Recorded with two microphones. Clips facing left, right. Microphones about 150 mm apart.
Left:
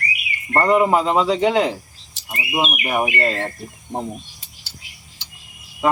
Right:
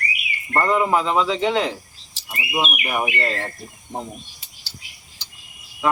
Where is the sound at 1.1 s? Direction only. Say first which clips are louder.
Left 3 dB; 45° left (ahead or behind).